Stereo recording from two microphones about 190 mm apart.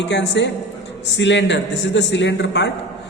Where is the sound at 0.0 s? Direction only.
70° left (ahead or behind).